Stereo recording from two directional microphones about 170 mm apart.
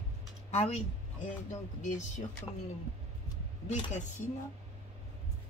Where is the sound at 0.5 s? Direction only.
40° left (ahead or behind).